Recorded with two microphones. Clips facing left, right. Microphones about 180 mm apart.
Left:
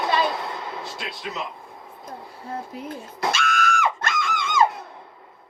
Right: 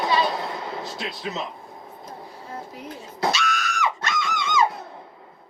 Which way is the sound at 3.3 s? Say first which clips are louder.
Left 3 dB; 50° left (ahead or behind).